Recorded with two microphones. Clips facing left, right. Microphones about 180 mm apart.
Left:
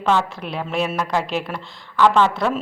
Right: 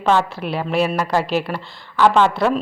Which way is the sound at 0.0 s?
5° right (ahead or behind).